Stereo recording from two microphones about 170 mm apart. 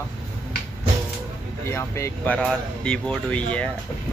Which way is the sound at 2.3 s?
5° left (ahead or behind).